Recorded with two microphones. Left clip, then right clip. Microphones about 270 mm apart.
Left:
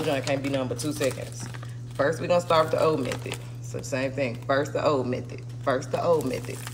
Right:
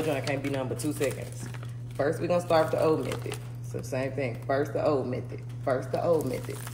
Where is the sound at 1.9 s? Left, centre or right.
Left.